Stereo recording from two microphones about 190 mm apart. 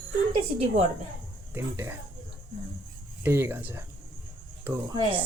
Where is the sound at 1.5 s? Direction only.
10° right (ahead or behind).